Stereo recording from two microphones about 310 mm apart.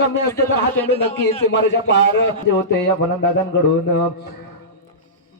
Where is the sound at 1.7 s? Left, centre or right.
Left.